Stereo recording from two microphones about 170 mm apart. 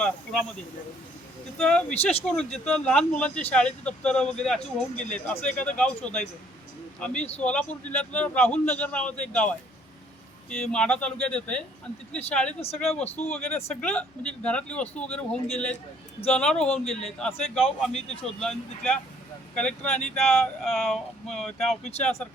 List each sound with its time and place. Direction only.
0.0 s speech: 5° left (ahead or behind)
1.5 s a man's voice: 5° left (ahead or behind)
12.5 s speech: 35° left (ahead or behind)
13.2 s a man's voice: 5° left (ahead or behind)